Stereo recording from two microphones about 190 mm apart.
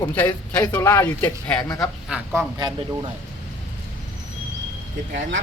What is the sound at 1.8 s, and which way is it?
Speech, 5° right (ahead or behind).